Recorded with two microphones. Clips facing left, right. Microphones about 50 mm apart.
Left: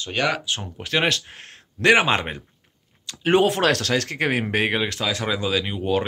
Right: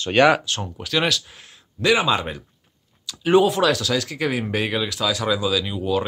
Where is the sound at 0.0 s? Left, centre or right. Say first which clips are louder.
Right 8 dB; right.